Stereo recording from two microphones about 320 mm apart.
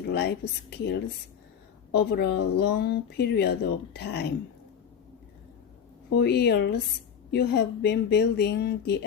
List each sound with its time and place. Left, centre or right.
0.1 s speech: left
2.0 s speech: left
6.1 s speech: left